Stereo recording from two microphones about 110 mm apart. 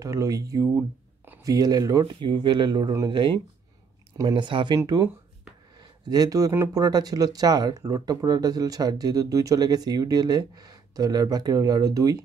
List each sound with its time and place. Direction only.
0.0 s speech: 30° right (ahead or behind); by 4.7 s 45° right (ahead or behind)
4.7 s speech: 35° right (ahead or behind)
5.8 s a sound: 35° right (ahead or behind)
6.7 s speech: 35° right (ahead or behind)